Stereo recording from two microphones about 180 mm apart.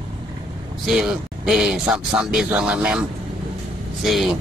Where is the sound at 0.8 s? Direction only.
5° right (ahead or behind).